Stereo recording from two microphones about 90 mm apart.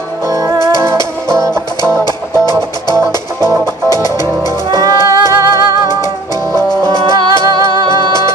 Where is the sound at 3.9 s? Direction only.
45° left (ahead or behind).